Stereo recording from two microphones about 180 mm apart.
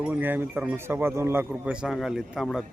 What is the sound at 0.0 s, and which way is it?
Speech, 10° right (ahead or behind).